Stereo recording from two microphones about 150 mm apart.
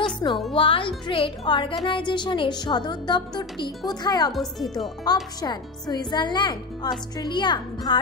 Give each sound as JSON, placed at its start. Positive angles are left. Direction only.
{"t": 0.2, "sound": "speech", "side_deg": 25}
{"t": 4.3, "sound": "speech", "side_deg": 0}
{"t": 5.4, "sound": "speech", "side_deg": 25}